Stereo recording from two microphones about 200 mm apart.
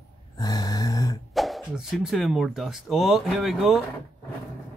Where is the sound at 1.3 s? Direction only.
Centre (ahead or behind).